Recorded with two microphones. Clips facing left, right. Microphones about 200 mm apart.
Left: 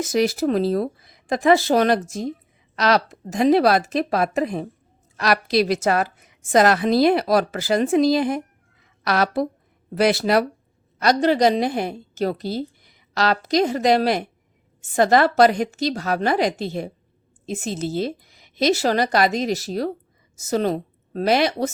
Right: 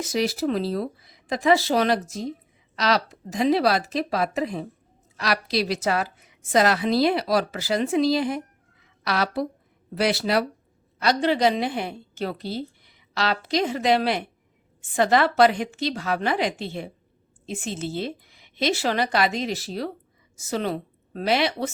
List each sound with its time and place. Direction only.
0.0 s a woman's voice: 50° left (ahead or behind)